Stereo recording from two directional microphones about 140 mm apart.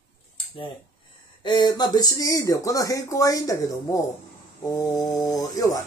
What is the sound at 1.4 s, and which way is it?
Speech, 30° left (ahead or behind).